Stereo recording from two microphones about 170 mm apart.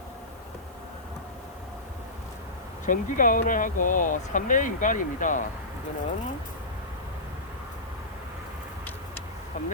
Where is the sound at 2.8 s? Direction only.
50° left (ahead or behind).